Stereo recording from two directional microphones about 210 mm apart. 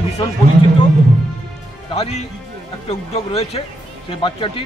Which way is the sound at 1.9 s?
30° left (ahead or behind).